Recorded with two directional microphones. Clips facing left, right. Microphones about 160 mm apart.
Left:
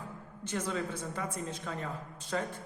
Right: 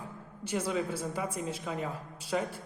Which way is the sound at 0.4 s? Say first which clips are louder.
Right 3 dB; 10° right (ahead or behind).